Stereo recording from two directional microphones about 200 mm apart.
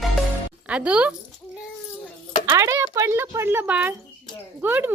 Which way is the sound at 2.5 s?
15° right (ahead or behind).